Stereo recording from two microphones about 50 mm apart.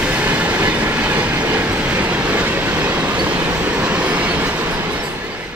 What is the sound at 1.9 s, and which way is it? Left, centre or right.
Vehicle, right.